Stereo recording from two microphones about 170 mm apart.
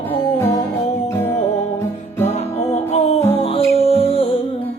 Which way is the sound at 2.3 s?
40° left (ahead or behind).